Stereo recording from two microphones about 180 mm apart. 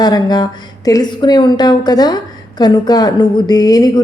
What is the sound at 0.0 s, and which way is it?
A woman's voice, 20° left (ahead or behind).